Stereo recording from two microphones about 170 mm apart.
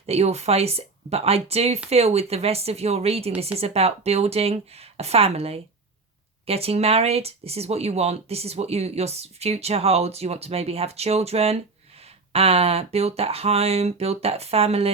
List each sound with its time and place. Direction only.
0.0 s speech: 40° right (ahead or behind)